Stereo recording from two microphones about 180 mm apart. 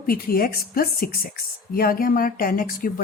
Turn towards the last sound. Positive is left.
turn(degrees=50)  # may be behind; listen again after turning